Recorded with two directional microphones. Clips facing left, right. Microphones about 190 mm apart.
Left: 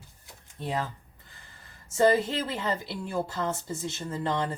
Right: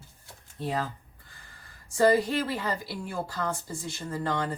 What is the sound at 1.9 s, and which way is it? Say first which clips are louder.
A woman's voice: even; 25° left (ahead or behind).